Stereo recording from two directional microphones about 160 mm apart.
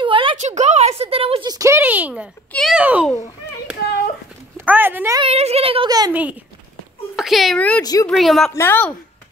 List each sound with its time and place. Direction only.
0.0 s a sound: 30° right (ahead or behind)
0.4 s a sound: 45° right (ahead or behind); by 2.2 s 10° right (ahead or behind)
2.5 s speech: centre (ahead or behind)
2.8 s speech: 10° right (ahead or behind)
4.6 s speech: 10° right (ahead or behind)
5.2 s a woman's voice: 40° right (ahead or behind)
5.9 s speech: 25° right (ahead or behind)
7.2 s speech: centre (ahead or behind)
7.8 s speech: 25° left (ahead or behind)
8.1 s speech: centre (ahead or behind)
8.5 s a woman's voice: 15° left (ahead or behind)